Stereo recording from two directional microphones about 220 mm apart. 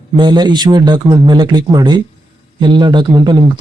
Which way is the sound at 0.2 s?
20° right (ahead or behind).